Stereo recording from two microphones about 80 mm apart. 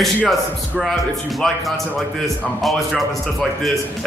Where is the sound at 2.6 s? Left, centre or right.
Centre.